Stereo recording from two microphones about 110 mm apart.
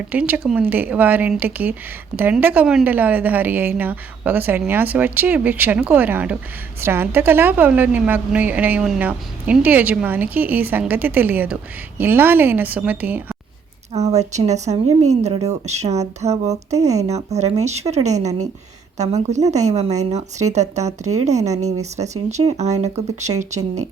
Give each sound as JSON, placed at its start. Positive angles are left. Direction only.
{"t": 0.1, "sound": "a woman's voice", "side_deg": -15}
{"t": 13.9, "sound": "a woman's voice", "side_deg": -90}